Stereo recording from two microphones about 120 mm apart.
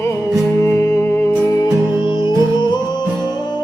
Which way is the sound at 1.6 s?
40° left (ahead or behind).